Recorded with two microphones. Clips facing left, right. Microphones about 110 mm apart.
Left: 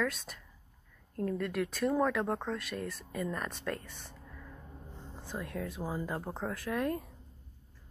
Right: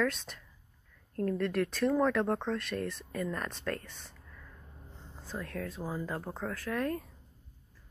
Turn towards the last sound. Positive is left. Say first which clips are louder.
# even
turn(degrees=20)  # may be behind; listen again after turning